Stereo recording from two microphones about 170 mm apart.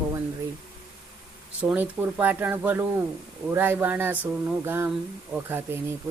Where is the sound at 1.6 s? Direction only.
10° right (ahead or behind).